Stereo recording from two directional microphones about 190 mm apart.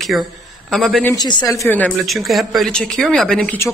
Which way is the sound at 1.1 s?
20° left (ahead or behind).